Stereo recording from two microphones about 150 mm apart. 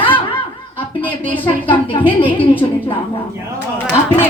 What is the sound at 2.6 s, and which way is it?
Speech, 30° left (ahead or behind).